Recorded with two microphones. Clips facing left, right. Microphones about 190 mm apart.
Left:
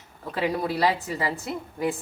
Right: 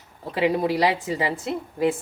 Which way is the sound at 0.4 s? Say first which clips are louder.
Right 4 dB; 15° right (ahead or behind).